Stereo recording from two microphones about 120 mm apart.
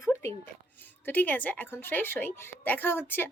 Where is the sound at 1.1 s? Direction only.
15° left (ahead or behind).